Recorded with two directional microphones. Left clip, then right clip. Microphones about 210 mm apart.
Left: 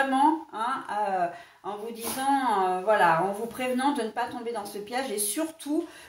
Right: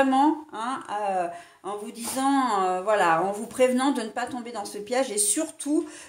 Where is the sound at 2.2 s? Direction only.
50° right (ahead or behind).